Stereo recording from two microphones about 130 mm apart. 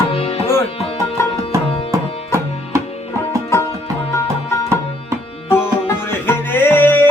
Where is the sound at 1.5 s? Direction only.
25° right (ahead or behind).